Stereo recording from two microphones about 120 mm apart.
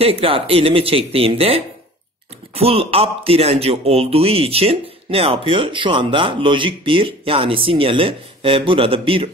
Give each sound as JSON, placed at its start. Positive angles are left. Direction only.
{"t": 0.0, "sound": "speech", "side_deg": -50}